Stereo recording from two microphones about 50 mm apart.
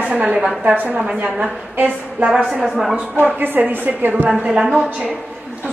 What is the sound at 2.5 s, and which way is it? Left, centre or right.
Speech, centre.